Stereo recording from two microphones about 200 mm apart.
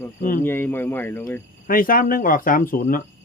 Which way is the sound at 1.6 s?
45° left (ahead or behind).